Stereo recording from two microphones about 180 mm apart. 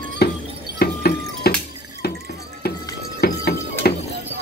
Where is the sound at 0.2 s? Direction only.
60° left (ahead or behind).